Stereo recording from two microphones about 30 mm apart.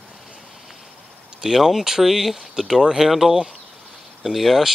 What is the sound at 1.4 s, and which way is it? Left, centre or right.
Speech, centre.